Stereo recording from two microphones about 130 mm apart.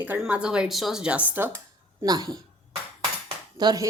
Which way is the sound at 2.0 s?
30° right (ahead or behind).